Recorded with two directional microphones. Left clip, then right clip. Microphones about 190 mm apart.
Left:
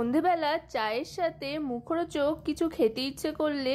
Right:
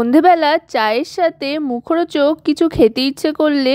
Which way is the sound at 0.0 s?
45° right (ahead or behind).